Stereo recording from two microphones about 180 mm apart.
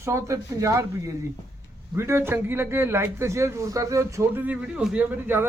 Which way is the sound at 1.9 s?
15° right (ahead or behind).